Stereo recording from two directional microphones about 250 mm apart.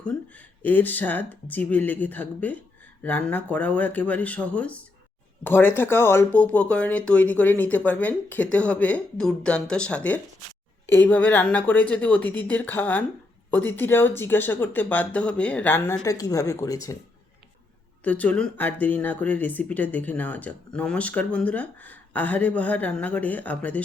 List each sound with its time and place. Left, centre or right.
0.3 s speech: centre
18.0 s speech: centre